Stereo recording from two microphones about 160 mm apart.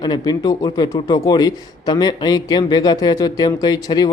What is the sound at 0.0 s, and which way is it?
A man's voice, 25° left (ahead or behind).